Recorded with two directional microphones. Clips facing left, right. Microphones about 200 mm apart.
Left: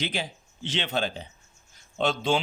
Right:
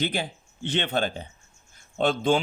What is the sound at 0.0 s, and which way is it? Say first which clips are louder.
Speech: right 3 dB; 55° right (ahead or behind).